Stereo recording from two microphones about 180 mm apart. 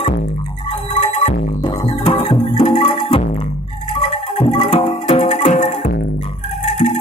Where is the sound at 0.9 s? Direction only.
40° left (ahead or behind).